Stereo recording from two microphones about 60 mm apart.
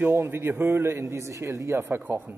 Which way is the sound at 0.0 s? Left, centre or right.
Right.